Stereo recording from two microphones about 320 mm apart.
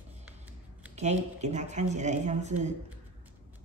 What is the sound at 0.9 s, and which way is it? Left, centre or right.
Speech, right.